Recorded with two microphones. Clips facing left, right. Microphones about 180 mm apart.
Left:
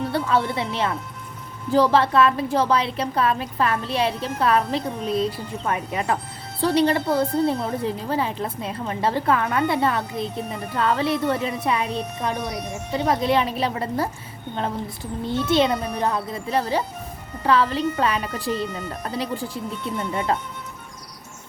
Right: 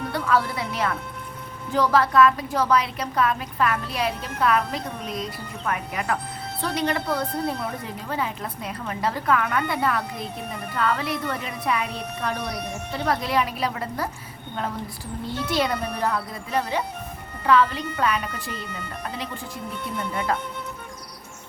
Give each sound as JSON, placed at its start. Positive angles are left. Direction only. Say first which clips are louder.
{"t": 0.1, "sound": "a woman's voice", "louder": "right 1 dB", "side_deg": 25}
{"t": 15.4, "sound": "a woman's voice", "louder": "left 4 dB", "side_deg": 25}